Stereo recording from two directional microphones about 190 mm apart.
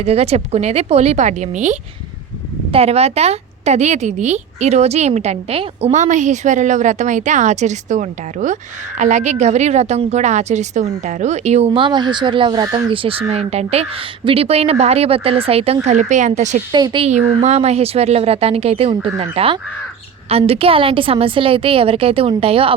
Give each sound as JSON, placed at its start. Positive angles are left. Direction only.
{"t": 0.0, "sound": "a woman's voice", "side_deg": -35}
{"t": 16.7, "sound": "a woman's voice", "side_deg": -25}
{"t": 17.1, "sound": "a woman's voice", "side_deg": -35}